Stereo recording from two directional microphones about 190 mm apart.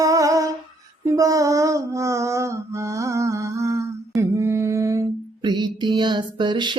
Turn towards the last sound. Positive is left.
turn(degrees=-25)  # may be behind; listen again after turning